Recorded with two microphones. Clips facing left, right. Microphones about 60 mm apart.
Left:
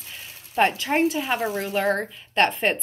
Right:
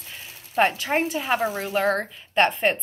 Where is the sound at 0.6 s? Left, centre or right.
Centre.